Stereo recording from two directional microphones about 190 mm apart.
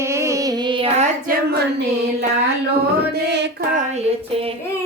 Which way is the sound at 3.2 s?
60° right (ahead or behind).